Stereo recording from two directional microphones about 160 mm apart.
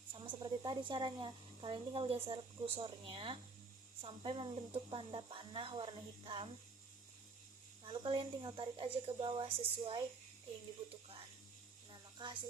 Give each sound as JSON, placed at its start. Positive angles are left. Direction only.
{"t": 0.3, "sound": "speech", "side_deg": -30}
{"t": 7.9, "sound": "speech", "side_deg": -35}
{"t": 11.9, "sound": "a sound", "side_deg": -30}